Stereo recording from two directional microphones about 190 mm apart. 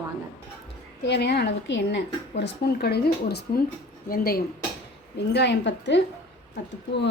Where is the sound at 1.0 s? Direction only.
60° left (ahead or behind).